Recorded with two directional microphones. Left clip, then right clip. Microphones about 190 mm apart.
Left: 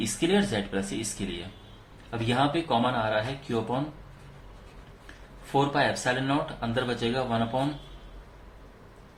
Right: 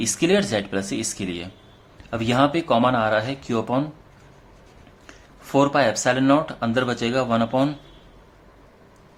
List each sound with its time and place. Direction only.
0.0 s speech: 50° right (ahead or behind)
5.5 s speech: 50° right (ahead or behind)